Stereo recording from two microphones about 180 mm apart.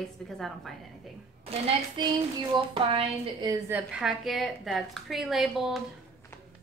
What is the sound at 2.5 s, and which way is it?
Speech, 30° right (ahead or behind).